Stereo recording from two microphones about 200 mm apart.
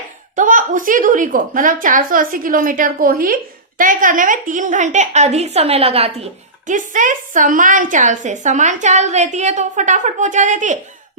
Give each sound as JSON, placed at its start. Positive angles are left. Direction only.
{"t": 0.3, "sound": "a woman's voice", "side_deg": -40}
{"t": 6.7, "sound": "a woman's voice", "side_deg": -40}